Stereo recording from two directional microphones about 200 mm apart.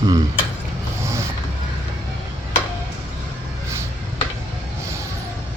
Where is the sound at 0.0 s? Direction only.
20° right (ahead or behind).